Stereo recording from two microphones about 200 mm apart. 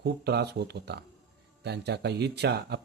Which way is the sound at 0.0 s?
55° right (ahead or behind).